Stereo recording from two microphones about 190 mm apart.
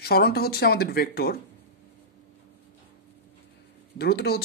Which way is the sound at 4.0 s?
55° left (ahead or behind).